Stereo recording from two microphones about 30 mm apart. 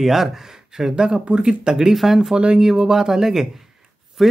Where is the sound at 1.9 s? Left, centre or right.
Centre.